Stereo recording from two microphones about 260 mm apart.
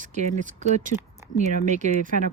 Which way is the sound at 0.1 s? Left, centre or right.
Right.